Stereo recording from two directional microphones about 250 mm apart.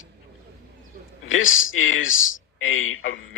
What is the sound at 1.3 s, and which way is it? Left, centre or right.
Speech, left.